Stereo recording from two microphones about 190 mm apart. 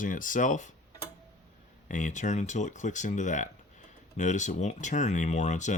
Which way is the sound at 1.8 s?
40° left (ahead or behind).